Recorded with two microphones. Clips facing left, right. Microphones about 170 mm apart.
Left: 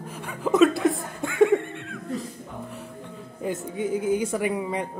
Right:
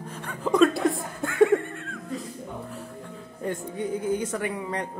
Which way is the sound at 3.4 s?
5° left (ahead or behind).